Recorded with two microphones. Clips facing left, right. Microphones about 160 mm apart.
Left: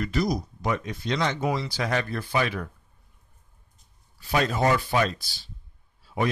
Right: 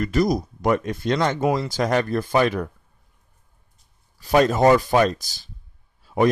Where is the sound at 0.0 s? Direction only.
50° right (ahead or behind).